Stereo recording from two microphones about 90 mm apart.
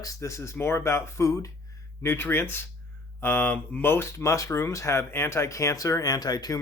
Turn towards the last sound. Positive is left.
turn(degrees=50)  # may be behind; listen again after turning